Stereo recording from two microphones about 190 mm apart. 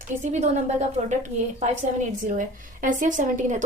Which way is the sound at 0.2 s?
40° right (ahead or behind).